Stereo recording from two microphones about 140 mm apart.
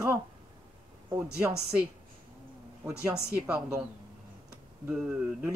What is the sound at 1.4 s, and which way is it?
Speech, 10° right (ahead or behind).